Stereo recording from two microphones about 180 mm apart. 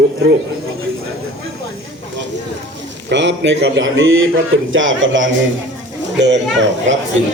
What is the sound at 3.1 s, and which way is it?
A man's voice, 80° right.